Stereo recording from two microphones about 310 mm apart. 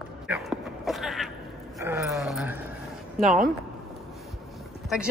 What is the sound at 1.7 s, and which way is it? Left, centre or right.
Speech, centre.